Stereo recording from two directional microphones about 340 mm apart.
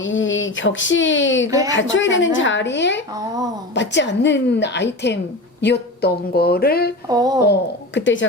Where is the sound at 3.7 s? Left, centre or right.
Left.